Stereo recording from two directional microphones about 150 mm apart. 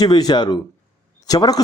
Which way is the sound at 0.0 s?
30° left (ahead or behind).